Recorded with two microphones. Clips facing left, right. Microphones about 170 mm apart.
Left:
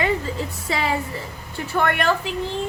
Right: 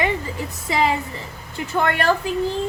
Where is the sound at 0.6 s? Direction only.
20° right (ahead or behind).